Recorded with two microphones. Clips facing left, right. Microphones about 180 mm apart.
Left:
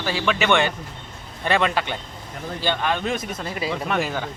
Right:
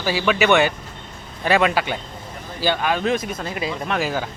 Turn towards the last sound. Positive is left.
turn(degrees=-5)  # may be behind; listen again after turning